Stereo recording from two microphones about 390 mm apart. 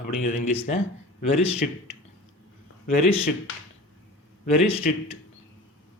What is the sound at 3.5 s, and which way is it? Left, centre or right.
Speech, left.